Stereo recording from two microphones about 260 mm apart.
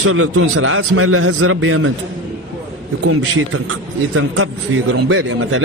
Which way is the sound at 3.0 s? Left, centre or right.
Right.